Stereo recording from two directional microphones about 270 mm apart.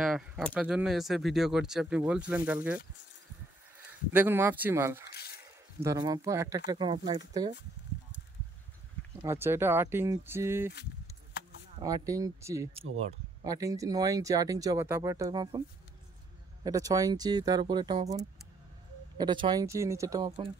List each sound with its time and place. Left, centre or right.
0.0 s speech: centre
4.1 s speech: centre
5.1 s a sound: left
5.8 s speech: centre
9.2 s speech: centre
11.8 s speech: centre
16.6 s speech: centre